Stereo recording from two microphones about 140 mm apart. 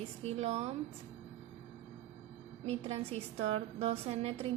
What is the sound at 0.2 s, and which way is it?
Speech, 50° right (ahead or behind).